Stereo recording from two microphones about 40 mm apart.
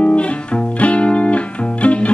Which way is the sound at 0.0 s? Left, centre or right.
Left.